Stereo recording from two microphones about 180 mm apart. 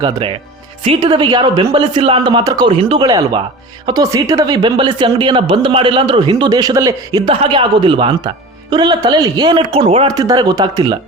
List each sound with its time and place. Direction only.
0.0 s a woman's voice: 30° right (ahead or behind)